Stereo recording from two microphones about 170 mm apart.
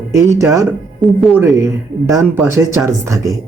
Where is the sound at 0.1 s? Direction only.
20° right (ahead or behind).